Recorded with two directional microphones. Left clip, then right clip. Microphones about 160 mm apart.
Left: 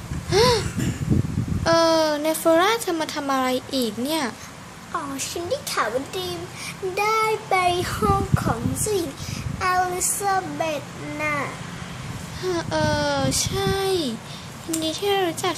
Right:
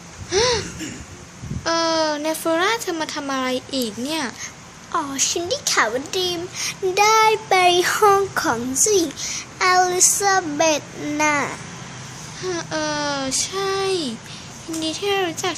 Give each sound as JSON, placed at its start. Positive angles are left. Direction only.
{"t": 0.3, "sound": "a sound", "side_deg": 5}
{"t": 1.6, "sound": "speech", "side_deg": 5}
{"t": 4.9, "sound": "speech", "side_deg": -50}
{"t": 12.4, "sound": "speech", "side_deg": 0}